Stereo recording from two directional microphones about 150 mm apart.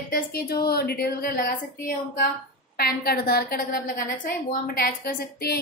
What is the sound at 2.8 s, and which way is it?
A woman's voice, 90° left.